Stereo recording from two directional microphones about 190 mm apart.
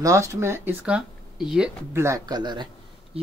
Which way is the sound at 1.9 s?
15° right (ahead or behind).